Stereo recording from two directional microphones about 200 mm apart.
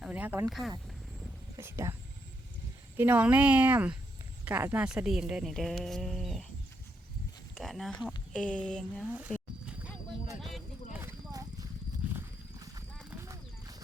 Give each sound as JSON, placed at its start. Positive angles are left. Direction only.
{"t": 0.0, "sound": "speech", "side_deg": -10}
{"t": 1.5, "sound": "a woman's voice", "side_deg": -15}
{"t": 3.0, "sound": "a woman's voice", "side_deg": -10}
{"t": 7.5, "sound": "a woman's voice", "side_deg": 0}
{"t": 9.3, "sound": "roaring cats", "side_deg": 0}
{"t": 10.9, "sound": "horse", "side_deg": -15}
{"t": 12.1, "sound": "a sound", "side_deg": -15}
{"t": 13.2, "sound": "clip-clop", "side_deg": -20}